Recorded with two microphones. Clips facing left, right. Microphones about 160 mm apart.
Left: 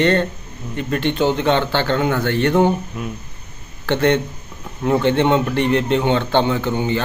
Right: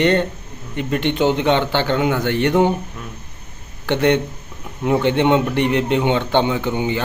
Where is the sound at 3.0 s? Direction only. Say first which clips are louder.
Left 7 dB; 10° left (ahead or behind).